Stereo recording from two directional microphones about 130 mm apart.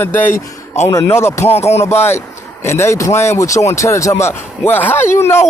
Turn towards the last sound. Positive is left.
turn(degrees=20)  # may be behind; listen again after turning